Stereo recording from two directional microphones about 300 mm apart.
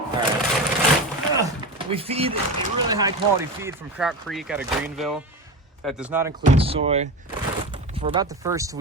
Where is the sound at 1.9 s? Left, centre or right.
Centre.